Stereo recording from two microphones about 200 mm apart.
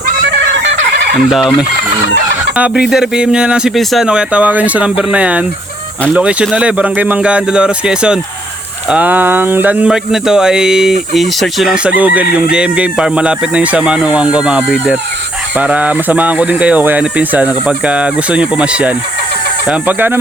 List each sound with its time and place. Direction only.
1.3 s speech: centre (ahead or behind)
12.2 s chicken: 50° left (ahead or behind)
12.5 s speech: 5° right (ahead or behind)